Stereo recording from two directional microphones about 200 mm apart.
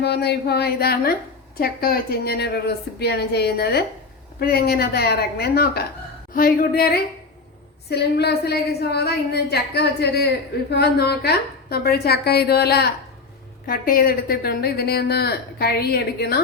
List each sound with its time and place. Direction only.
0.0 s a woman's voice: 55° left (ahead or behind)